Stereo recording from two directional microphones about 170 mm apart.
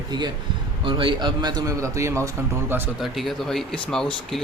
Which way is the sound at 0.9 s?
30° right (ahead or behind).